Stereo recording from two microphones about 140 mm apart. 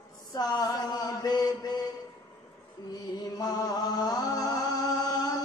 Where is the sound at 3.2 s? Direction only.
30° left (ahead or behind).